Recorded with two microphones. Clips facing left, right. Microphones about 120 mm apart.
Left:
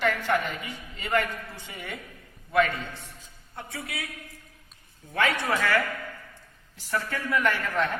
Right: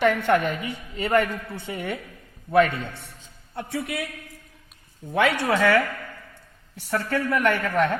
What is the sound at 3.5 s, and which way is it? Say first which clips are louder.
Speech: right 8 dB; 90° right.